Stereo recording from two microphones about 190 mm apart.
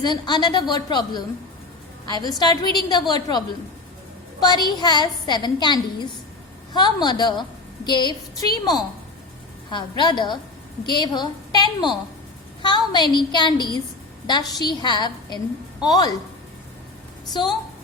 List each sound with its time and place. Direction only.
0.0 s a woman's voice: 20° left (ahead or behind)
10.0 s a woman's voice: 25° left (ahead or behind)
17.4 s a woman's voice: 25° left (ahead or behind)